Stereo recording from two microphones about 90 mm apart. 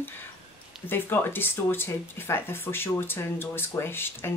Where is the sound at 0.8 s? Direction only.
25° left (ahead or behind).